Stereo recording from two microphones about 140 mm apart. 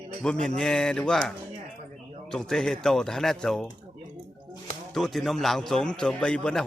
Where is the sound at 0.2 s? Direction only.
5° left (ahead or behind).